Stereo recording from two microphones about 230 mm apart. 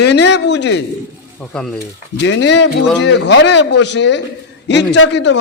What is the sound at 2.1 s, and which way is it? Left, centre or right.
A man's voice, left.